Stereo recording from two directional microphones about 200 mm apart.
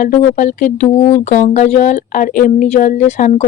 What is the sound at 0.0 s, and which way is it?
Speech, 40° left (ahead or behind).